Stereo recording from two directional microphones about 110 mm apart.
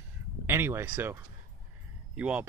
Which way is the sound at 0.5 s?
20° right (ahead or behind).